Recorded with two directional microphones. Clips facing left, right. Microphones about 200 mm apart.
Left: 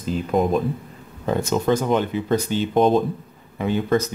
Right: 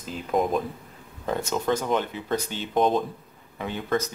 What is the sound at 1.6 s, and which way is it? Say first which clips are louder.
Speech: left 4 dB; 5° left (ahead or behind).